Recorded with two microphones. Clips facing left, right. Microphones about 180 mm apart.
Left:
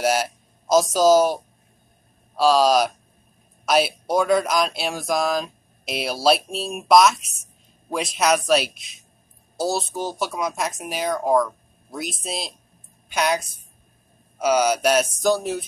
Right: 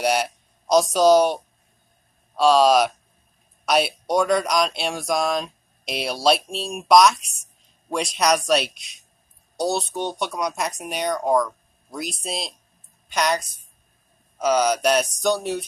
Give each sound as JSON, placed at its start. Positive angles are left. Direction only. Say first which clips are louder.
{"t": 0.0, "sound": "a woman's voice", "louder": "even", "side_deg": 0}
{"t": 14.4, "sound": "speech", "louder": "even", "side_deg": 10}